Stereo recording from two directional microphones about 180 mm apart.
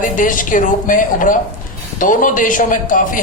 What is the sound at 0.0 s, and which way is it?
A man's voice, 45° left (ahead or behind).